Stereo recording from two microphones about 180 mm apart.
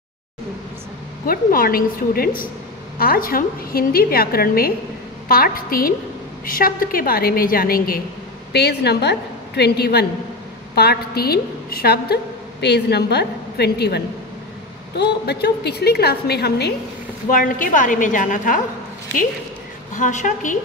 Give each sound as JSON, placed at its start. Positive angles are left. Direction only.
{"t": 1.2, "sound": "a woman's voice", "side_deg": 55}
{"t": 8.5, "sound": "a woman's voice", "side_deg": 65}
{"t": 17.3, "sound": "a woman's voice", "side_deg": 50}
{"t": 20.0, "sound": "a woman's voice", "side_deg": 45}